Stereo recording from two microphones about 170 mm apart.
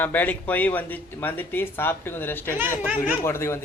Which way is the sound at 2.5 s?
10° right (ahead or behind).